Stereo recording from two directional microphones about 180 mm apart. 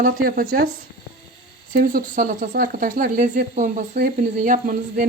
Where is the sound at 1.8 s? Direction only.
50° right (ahead or behind).